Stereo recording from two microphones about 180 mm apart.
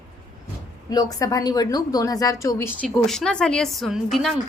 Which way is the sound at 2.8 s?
Centre (ahead or behind).